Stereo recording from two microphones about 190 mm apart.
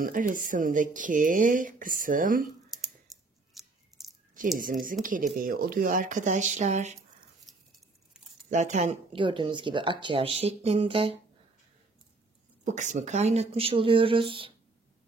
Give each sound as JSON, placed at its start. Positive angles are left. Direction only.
{"t": 0.0, "sound": "speech", "side_deg": -45}
{"t": 3.1, "sound": "a sound", "side_deg": 0}
{"t": 4.3, "sound": "speech", "side_deg": -45}
{"t": 7.5, "sound": "a sound", "side_deg": 0}
{"t": 8.5, "sound": "speech", "side_deg": -40}
{"t": 12.6, "sound": "speech", "side_deg": -40}